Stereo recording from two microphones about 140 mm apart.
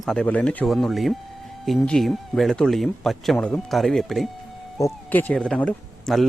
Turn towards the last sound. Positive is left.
turn(degrees=5)  # may be behind; listen again after turning